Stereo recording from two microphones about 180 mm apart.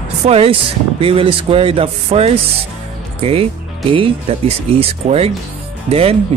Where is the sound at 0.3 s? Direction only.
30° right (ahead or behind).